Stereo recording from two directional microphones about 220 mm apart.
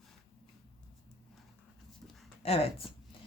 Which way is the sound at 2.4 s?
25° left (ahead or behind).